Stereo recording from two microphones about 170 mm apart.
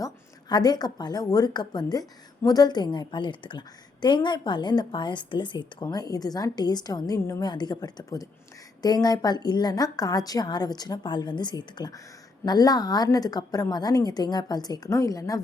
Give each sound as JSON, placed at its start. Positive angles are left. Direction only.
{"t": 0.0, "sound": "a woman's voice", "side_deg": 25}